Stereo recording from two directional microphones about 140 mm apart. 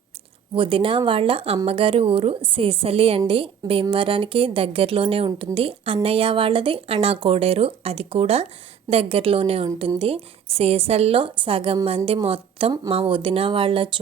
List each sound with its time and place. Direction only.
0.5 s a woman's voice: 40° right (ahead or behind)